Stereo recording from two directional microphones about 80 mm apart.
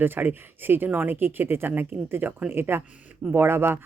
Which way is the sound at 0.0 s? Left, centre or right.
Right.